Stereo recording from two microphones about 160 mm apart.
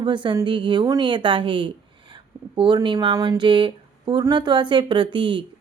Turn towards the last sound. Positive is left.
turn(degrees=-30)  # may be behind; listen again after turning